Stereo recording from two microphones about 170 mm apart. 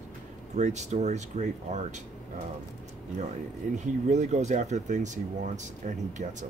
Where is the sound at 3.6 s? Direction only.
50° right (ahead or behind).